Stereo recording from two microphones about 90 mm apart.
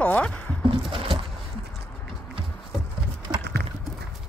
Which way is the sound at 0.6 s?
75° right (ahead or behind).